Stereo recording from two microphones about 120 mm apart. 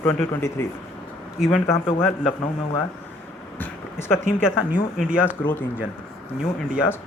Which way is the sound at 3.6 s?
20° left (ahead or behind).